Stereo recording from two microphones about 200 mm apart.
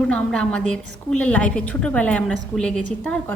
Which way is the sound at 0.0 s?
5° left (ahead or behind).